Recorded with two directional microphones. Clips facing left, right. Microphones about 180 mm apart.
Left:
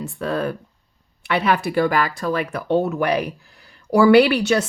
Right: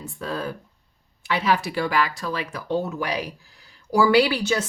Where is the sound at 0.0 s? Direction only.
65° left (ahead or behind).